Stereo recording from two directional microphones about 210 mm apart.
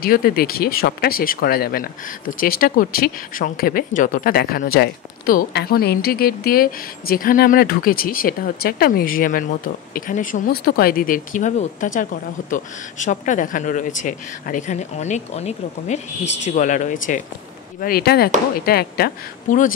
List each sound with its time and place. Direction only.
0.0 s speech: 45° left (ahead or behind)